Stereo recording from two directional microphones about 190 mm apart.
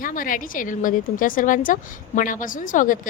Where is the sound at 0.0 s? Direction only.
45° left (ahead or behind).